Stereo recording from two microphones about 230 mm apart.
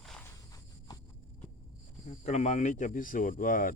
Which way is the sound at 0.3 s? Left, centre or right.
Centre.